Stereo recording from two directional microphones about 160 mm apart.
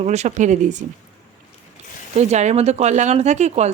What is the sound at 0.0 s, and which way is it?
Speech, 45° right (ahead or behind).